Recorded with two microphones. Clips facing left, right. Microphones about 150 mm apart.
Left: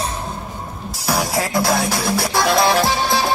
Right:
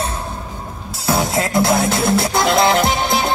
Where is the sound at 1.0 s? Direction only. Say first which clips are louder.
Right 2 dB; 25° right (ahead or behind).